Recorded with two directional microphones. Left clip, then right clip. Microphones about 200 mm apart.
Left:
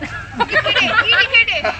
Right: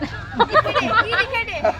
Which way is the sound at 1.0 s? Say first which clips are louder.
Left 8 dB; 60° right (ahead or behind).